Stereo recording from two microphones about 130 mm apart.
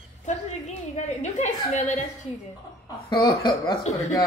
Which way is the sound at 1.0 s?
65° left (ahead or behind).